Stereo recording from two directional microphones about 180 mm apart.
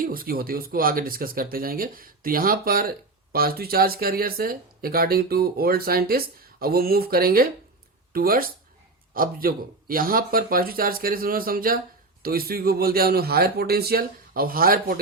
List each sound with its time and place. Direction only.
0.0 s speech: 50° right (ahead or behind)